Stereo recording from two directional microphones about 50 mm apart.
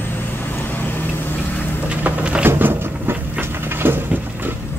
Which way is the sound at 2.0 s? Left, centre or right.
Right.